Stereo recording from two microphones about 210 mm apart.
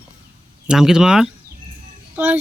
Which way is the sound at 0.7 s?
5° right (ahead or behind).